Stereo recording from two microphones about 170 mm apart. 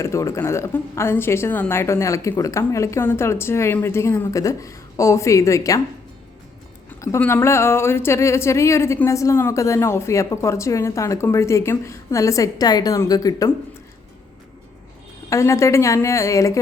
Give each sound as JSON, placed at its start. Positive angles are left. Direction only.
{"t": 0.0, "sound": "speech", "side_deg": 15}
{"t": 7.0, "sound": "speech", "side_deg": 15}
{"t": 15.3, "sound": "speech", "side_deg": 15}